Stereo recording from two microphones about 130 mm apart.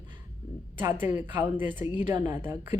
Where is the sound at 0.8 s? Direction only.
15° right (ahead or behind).